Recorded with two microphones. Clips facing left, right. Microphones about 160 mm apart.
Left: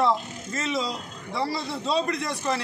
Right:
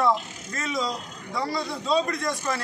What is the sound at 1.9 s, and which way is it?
Speech, centre (ahead or behind).